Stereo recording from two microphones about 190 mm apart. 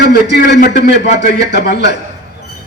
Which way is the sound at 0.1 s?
60° left (ahead or behind).